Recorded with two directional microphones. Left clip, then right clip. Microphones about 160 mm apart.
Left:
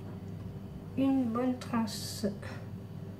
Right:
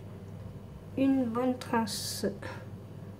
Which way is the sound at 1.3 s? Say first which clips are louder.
Right 3 dB; 65° right (ahead or behind).